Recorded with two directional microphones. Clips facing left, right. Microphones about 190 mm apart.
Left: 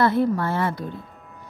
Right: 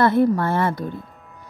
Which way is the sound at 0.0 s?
50° right (ahead or behind).